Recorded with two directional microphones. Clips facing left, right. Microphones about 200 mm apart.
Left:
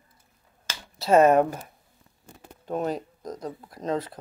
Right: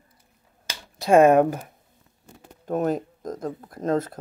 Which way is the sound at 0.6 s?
15° right (ahead or behind).